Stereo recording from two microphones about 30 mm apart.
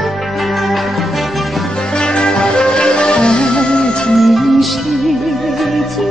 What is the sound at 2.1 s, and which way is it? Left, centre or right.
Music, left.